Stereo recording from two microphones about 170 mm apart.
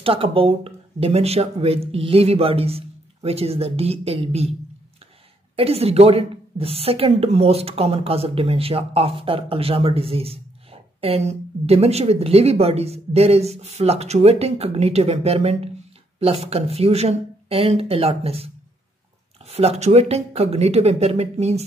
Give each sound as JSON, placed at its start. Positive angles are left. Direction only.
{"t": 0.0, "sound": "a woman's voice", "side_deg": -35}
{"t": 5.6, "sound": "a woman's voice", "side_deg": -35}